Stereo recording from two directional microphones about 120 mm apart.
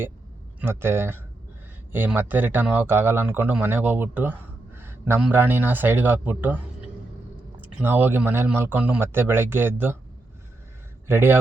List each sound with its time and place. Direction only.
0.6 s speech: 20° right (ahead or behind)
7.6 s speech: 15° right (ahead or behind)
11.1 s speech: 20° right (ahead or behind)